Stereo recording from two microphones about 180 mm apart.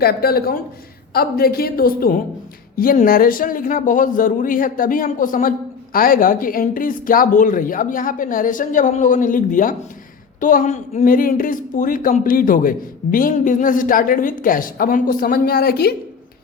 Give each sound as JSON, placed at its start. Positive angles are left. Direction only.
{"t": 0.0, "sound": "a woman's voice", "side_deg": 60}